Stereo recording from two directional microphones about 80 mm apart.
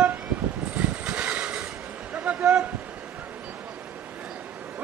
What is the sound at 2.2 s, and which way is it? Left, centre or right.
Speech, centre.